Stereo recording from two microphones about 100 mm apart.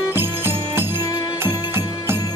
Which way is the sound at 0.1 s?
20° right (ahead or behind).